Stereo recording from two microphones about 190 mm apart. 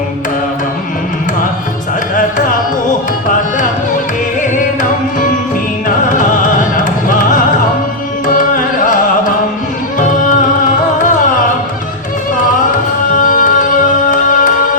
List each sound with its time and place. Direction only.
6.1 s music: 40° left (ahead or behind)
10.0 s music: 40° left (ahead or behind)
13.1 s music: 45° left (ahead or behind)